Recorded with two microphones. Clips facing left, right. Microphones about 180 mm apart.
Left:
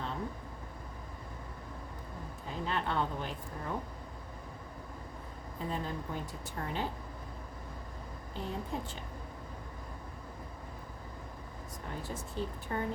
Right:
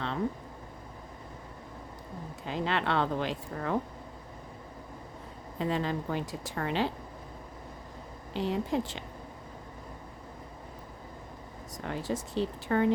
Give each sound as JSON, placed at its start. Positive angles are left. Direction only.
{"t": 2.5, "sound": "speech", "side_deg": -90}
{"t": 5.5, "sound": "a woman's voice", "side_deg": -90}
{"t": 8.3, "sound": "speech", "side_deg": -90}
{"t": 11.9, "sound": "speech", "side_deg": -90}